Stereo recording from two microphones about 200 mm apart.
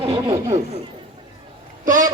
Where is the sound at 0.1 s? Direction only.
15° right (ahead or behind).